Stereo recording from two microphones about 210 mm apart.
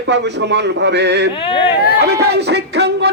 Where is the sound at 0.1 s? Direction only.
55° right (ahead or behind).